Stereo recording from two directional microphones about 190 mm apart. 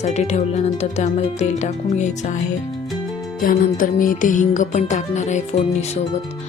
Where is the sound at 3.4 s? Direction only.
45° left (ahead or behind).